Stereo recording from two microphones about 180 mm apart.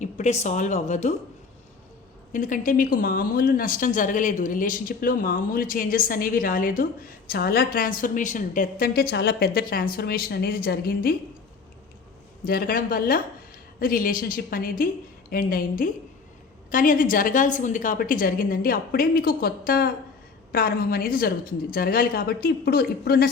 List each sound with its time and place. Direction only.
0.0 s a woman's voice: 40° left (ahead or behind)
2.3 s speech: 45° left (ahead or behind)
12.5 s speech: 55° left (ahead or behind)